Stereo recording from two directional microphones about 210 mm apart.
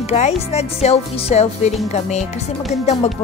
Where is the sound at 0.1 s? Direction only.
30° left (ahead or behind).